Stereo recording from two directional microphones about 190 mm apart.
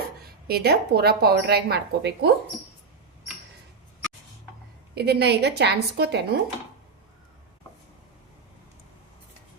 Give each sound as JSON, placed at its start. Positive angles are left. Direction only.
{"t": 0.4, "sound": "speech", "side_deg": -55}
{"t": 4.9, "sound": "speech", "side_deg": -60}